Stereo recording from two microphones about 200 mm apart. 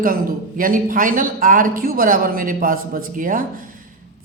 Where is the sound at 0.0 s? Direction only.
45° right (ahead or behind).